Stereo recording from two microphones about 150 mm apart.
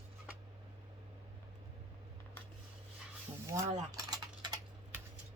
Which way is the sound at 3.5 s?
20° right (ahead or behind).